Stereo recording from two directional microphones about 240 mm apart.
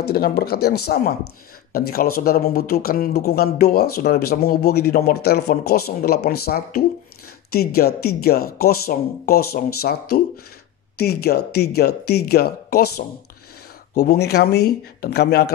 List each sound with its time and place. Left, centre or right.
0.1 s speech: left
14.0 s speech: left